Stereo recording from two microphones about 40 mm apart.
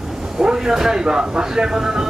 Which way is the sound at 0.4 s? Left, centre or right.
Centre.